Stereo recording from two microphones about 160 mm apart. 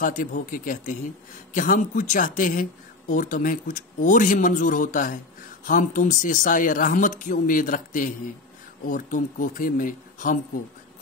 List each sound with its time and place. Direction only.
0.0 s speech: 55° left (ahead or behind)